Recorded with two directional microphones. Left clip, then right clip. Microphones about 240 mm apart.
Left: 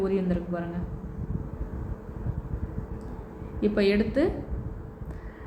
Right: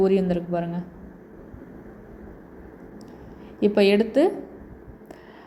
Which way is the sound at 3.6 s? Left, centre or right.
Right.